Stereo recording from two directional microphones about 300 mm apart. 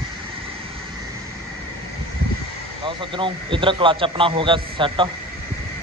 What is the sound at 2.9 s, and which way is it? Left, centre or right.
A man's voice, centre.